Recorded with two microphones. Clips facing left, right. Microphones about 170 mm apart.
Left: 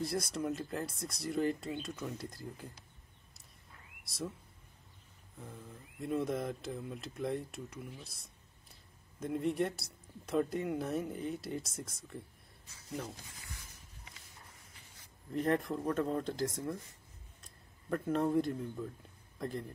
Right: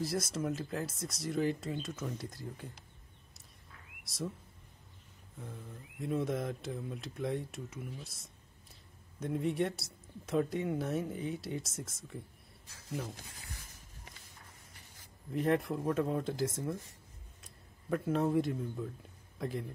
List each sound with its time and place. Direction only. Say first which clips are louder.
0.0 s speech: right 1 dB; centre (ahead or behind)
4.0 s speech: right 1 dB; centre (ahead or behind)
5.4 s speech: right 2 dB; centre (ahead or behind)
13.1 s a sound: right 1 dB; 55° right (ahead or behind)
15.3 s a man's voice: right 1 dB; centre (ahead or behind)